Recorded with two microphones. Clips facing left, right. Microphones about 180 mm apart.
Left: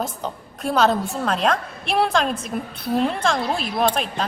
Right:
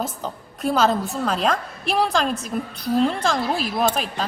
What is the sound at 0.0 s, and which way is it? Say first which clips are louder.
A woman's voice: left 1 dB; centre (ahead or behind).